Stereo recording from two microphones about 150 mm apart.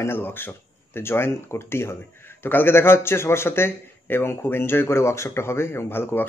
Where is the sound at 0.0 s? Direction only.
15° left (ahead or behind).